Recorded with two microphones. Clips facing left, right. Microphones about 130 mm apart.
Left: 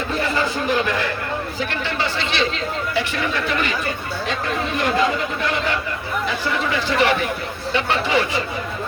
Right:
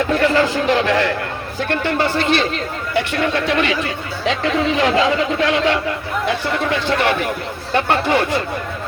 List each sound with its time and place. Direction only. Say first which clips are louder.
0.1 s a man's voice: right 5 dB; 75° right (ahead or behind)
1.7 s speech: right 10 dB; 50° right (ahead or behind)
2.9 s speech: right 7 dB; 60° right (ahead or behind)
4.3 s speech: right 7 dB; 90° right
6.2 s speech: right 4 dB; 60° right (ahead or behind)